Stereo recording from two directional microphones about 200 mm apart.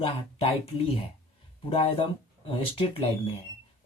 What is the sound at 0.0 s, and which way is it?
Speech, 25° left (ahead or behind).